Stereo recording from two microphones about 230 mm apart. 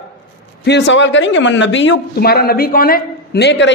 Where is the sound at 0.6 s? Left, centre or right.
Left.